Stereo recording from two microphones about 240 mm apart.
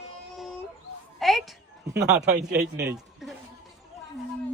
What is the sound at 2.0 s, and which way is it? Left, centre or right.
Speech, right.